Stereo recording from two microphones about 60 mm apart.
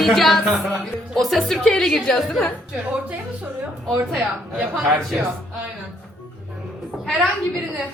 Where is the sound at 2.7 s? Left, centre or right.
Centre.